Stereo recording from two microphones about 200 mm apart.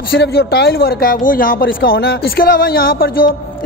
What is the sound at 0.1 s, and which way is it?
Speech, 55° left (ahead or behind).